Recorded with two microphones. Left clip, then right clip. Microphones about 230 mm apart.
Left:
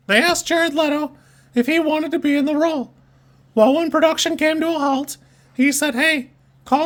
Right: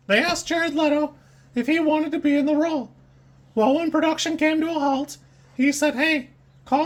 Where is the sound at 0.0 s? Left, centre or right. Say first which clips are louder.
Left 4 dB; left.